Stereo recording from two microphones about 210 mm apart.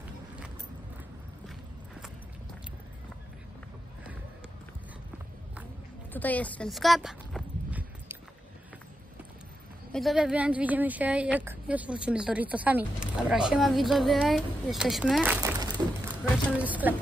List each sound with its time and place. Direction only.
6.1 s clip-clop: 5° left (ahead or behind)
9.9 s a woman's voice: centre (ahead or behind)
15.4 s a sound: 20° right (ahead or behind)
16.6 s a woman's voice: 5° right (ahead or behind)